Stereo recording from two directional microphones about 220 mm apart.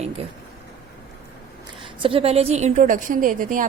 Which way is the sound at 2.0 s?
25° right (ahead or behind).